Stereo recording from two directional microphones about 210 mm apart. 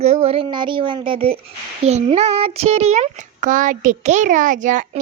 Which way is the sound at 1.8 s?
30° right (ahead or behind).